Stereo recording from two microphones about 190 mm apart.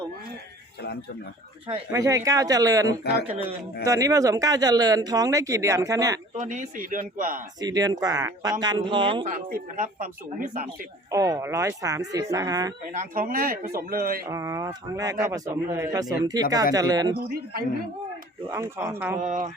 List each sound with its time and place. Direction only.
1.6 s speech: 20° right (ahead or behind)
6.4 s speech: 40° right (ahead or behind)
7.6 s speech: 20° right (ahead or behind)
9.2 s speech: 45° right (ahead or behind)
11.1 s speech: 20° right (ahead or behind)
12.9 s speech: 45° right (ahead or behind)
14.3 s speech: 15° right (ahead or behind)
18.5 s speech: 15° right (ahead or behind)
19.2 s speech: 40° right (ahead or behind)